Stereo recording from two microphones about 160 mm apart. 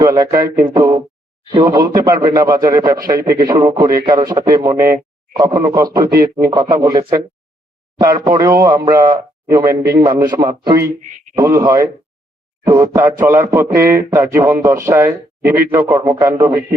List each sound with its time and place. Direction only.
0.0 s a man's voice: 25° right (ahead or behind)